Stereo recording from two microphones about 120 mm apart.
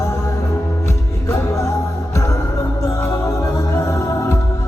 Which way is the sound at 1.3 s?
25° left (ahead or behind).